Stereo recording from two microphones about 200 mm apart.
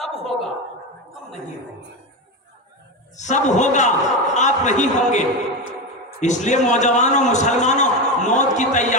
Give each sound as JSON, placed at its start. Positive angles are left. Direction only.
{"t": 0.0, "sound": "a woman's voice", "side_deg": 0}
{"t": 3.2, "sound": "a man's voice", "side_deg": 35}